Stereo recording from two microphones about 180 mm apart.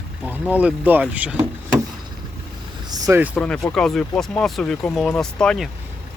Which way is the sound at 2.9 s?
20° right (ahead or behind).